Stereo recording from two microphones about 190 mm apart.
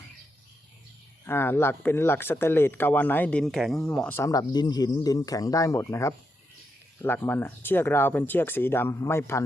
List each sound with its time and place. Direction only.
1.3 s speech: 10° left (ahead or behind)